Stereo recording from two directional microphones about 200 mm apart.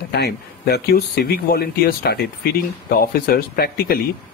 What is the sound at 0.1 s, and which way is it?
Speech, 55° left (ahead or behind).